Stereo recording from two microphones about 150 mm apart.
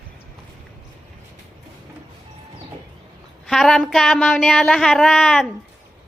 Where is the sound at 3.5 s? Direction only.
Centre (ahead or behind).